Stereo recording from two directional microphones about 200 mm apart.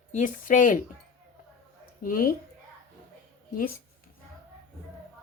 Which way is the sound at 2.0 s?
45° left (ahead or behind).